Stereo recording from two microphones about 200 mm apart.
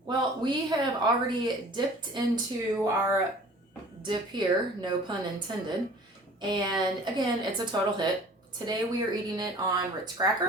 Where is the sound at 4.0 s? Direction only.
25° right (ahead or behind).